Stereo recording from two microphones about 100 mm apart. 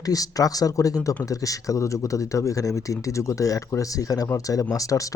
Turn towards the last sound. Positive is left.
turn(degrees=35)  # may be behind; listen again after turning